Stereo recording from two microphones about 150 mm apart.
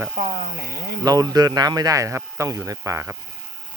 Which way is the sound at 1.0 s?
25° right (ahead or behind).